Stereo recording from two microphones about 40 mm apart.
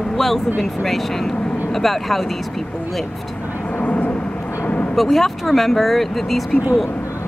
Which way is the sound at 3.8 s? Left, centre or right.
Left.